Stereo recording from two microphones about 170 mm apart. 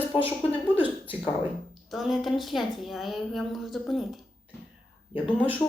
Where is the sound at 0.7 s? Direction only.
10° right (ahead or behind).